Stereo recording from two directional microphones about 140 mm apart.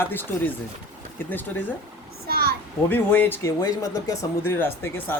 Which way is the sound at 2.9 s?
15° left (ahead or behind).